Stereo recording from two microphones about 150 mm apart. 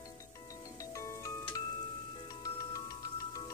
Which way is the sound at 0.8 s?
20° left (ahead or behind).